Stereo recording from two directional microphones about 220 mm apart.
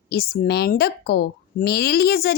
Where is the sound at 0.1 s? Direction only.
45° left (ahead or behind).